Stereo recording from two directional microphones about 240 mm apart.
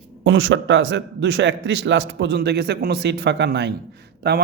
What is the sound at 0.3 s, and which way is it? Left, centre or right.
A woman's voice, right.